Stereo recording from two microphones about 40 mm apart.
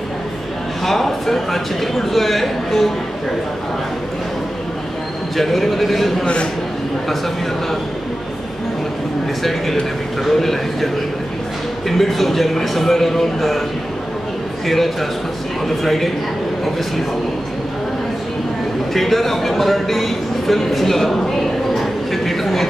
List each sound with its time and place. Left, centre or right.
0.8 s speech: centre
5.4 s speech: centre
6.2 s a man's voice: left
9.4 s speech: centre
12.0 s speech: centre
14.7 s speech: centre
18.9 s speech: centre
21.7 s a sound: centre